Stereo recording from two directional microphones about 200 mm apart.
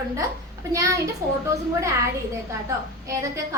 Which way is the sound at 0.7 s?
15° right (ahead or behind).